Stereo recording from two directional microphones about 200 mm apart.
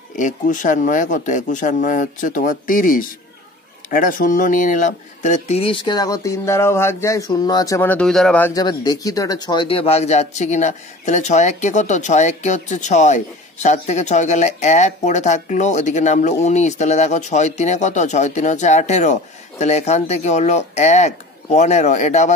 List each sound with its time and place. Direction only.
0.2 s speech: 40° left (ahead or behind)